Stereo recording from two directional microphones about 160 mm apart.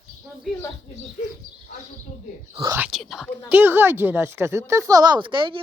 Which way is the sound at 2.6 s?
20° right (ahead or behind).